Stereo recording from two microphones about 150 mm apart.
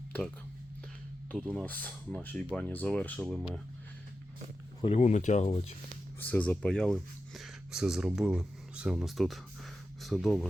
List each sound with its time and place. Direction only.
1.3 s speech: 5° left (ahead or behind)
4.8 s speech: 45° left (ahead or behind)
6.1 s speech: 10° left (ahead or behind)